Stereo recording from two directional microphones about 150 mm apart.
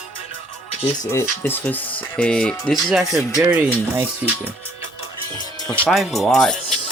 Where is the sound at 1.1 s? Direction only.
15° left (ahead or behind); by 3.4 s centre (ahead or behind).